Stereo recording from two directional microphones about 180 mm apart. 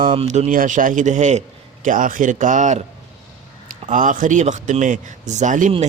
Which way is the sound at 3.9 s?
45° right (ahead or behind).